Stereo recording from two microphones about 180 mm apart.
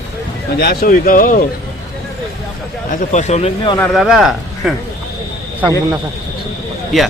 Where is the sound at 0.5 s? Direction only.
60° left (ahead or behind).